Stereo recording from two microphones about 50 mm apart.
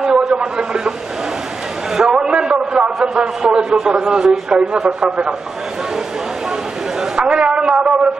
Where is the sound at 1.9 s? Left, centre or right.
Centre.